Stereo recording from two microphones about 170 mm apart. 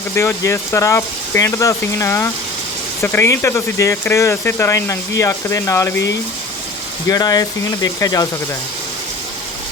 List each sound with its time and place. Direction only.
0.2 s speech: 15° left (ahead or behind)
7.1 s speech: 20° left (ahead or behind)